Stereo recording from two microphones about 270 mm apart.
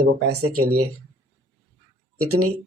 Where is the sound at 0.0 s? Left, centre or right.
Right.